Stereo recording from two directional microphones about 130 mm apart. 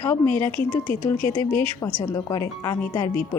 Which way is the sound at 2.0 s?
30° left (ahead or behind).